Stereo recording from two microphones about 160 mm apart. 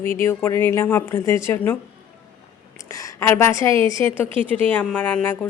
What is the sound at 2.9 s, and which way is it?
A woman's voice, 20° left (ahead or behind).